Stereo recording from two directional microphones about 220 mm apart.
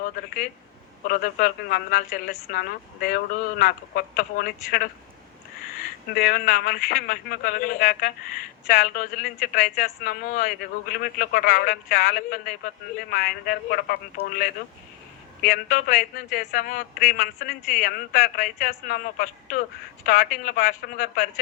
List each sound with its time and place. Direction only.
1.0 s a man's voice: 40° left (ahead or behind)
6.1 s a man's voice: 40° left (ahead or behind)